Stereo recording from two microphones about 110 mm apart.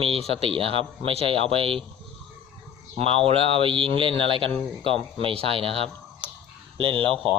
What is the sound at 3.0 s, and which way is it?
A man's voice, 60° right (ahead or behind).